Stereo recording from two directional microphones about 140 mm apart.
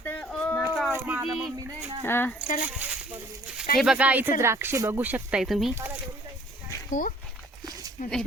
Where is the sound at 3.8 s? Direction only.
5° right (ahead or behind).